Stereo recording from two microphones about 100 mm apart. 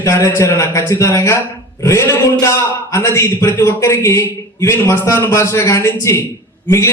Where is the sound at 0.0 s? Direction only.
30° left (ahead or behind).